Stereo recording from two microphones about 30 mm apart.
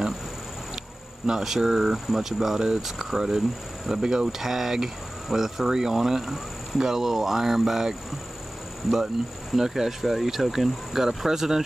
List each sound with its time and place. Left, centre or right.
1.4 s speech: centre
4.0 s speech: right
4.3 s speech: centre
8.9 s speech: centre